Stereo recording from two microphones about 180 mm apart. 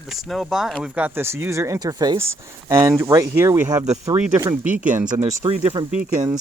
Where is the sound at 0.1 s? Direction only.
Centre (ahead or behind); by 4.2 s 15° right (ahead or behind).